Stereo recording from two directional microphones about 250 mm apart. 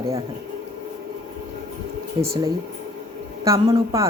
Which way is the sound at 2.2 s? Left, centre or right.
Centre.